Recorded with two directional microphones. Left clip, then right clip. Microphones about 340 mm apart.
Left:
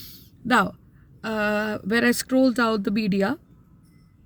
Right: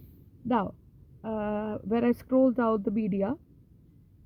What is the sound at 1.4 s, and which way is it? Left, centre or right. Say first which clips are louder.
Speech: left 9 dB; left.